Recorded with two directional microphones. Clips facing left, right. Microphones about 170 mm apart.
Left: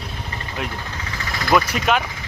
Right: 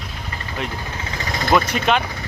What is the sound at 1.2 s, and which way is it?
Engine, 20° right (ahead or behind).